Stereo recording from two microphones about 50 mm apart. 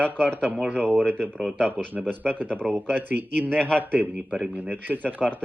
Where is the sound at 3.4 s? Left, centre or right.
Centre.